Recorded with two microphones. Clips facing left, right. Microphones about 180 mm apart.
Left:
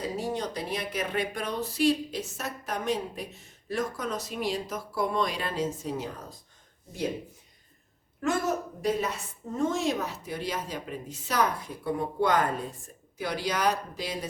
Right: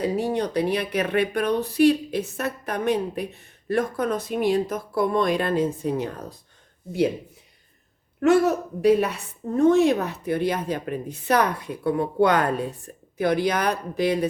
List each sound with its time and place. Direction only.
0.0 s speech: 65° right (ahead or behind)
8.2 s speech: 65° right (ahead or behind)